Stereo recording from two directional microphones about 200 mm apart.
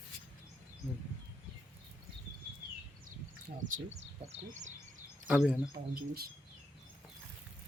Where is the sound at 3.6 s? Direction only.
35° right (ahead or behind).